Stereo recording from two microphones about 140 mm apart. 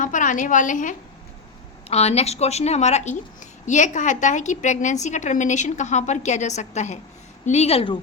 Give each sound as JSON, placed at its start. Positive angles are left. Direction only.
{"t": 0.0, "sound": "a woman's voice", "side_deg": 65}
{"t": 1.9, "sound": "a woman's voice", "side_deg": 50}